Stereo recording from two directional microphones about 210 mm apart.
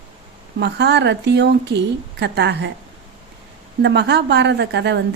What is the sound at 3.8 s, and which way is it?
A woman's voice, 55° right (ahead or behind).